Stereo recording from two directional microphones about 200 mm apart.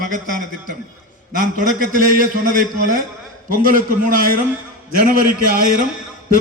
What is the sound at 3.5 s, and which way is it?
A man's voice, 45° right (ahead or behind).